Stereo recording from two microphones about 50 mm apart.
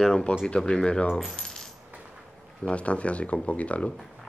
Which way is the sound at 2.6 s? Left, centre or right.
Left.